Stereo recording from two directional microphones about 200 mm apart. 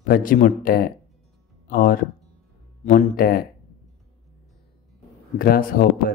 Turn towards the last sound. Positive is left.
turn(degrees=45)  # may be behind; listen again after turning